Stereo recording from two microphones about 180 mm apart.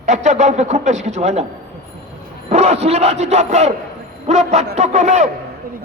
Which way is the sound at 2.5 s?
40° right (ahead or behind).